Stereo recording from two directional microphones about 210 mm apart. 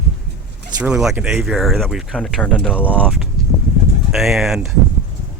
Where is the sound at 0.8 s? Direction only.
5° right (ahead or behind).